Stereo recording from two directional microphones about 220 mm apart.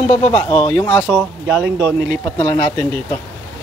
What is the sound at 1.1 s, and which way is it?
Speech, 10° right (ahead or behind).